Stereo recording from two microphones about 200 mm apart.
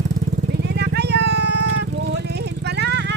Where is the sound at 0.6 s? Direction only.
55° right (ahead or behind).